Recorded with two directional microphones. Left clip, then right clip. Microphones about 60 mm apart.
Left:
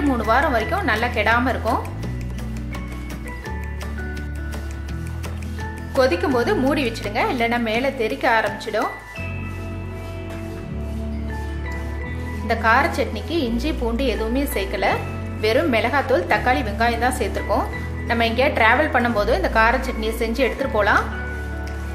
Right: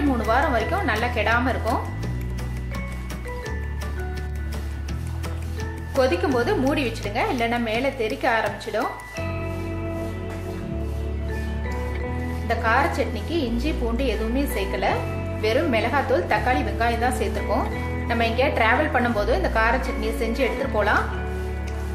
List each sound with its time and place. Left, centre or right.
0.3 s a woman's voice: left
6.2 s a woman's voice: left
12.4 s a woman's voice: left